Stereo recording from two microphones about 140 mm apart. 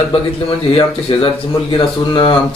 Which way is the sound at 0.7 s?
40° left (ahead or behind).